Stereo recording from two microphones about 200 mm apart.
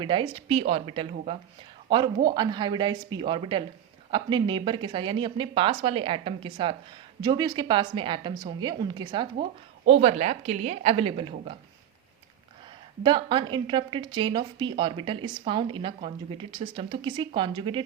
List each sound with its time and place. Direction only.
0.0 s a woman's voice: 25° right (ahead or behind)
13.0 s a woman's voice: 25° right (ahead or behind)